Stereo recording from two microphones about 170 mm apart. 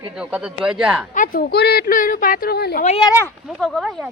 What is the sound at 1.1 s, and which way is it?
A woman's voice, 55° left (ahead or behind).